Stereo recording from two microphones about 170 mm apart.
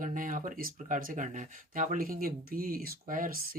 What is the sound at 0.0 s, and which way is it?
Speech, 50° right (ahead or behind).